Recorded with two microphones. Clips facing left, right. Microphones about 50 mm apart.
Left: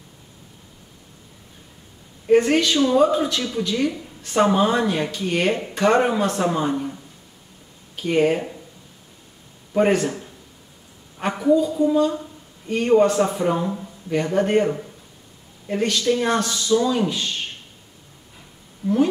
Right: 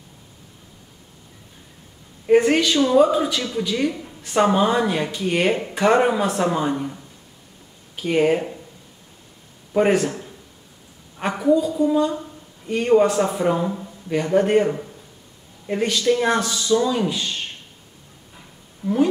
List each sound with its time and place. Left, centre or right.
2.2 s a woman's voice: centre
9.8 s a man's voice: centre
11.3 s a man's voice: centre
15.6 s a man's voice: centre
18.8 s speech: centre